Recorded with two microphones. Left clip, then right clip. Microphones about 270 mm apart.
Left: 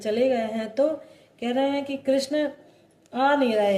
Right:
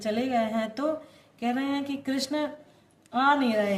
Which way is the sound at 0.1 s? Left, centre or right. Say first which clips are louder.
Left 4 dB; right.